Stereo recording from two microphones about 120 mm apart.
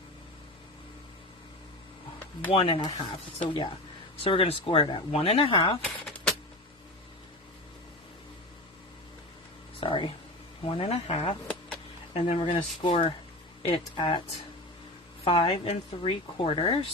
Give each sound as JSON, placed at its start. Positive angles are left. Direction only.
{"t": 2.5, "sound": "speech", "side_deg": 55}
{"t": 5.8, "sound": "a sound", "side_deg": 5}
{"t": 9.8, "sound": "speech", "side_deg": 45}
{"t": 15.2, "sound": "speech", "side_deg": 50}
{"t": 16.5, "sound": "speech", "side_deg": 45}